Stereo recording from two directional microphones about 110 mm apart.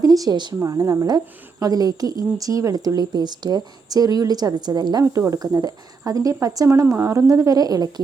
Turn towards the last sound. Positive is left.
turn(degrees=-35)  # may be behind; listen again after turning